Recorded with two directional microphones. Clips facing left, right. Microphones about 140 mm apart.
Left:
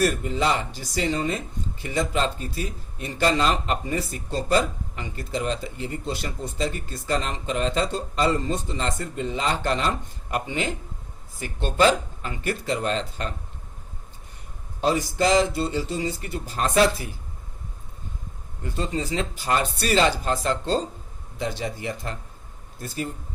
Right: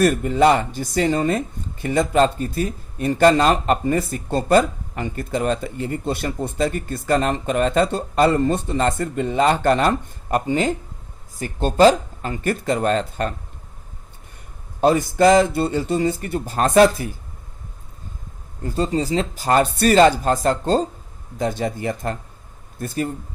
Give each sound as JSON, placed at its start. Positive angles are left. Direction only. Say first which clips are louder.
{"t": 0.0, "sound": "speech", "louder": "right 7 dB", "side_deg": -55}
{"t": 14.8, "sound": "speech", "louder": "right 7 dB", "side_deg": -50}
{"t": 18.6, "sound": "speech", "louder": "right 7 dB", "side_deg": -40}